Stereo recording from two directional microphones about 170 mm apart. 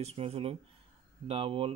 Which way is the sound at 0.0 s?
35° right (ahead or behind).